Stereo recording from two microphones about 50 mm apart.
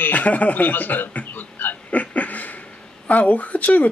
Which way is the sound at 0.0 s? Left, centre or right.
Left.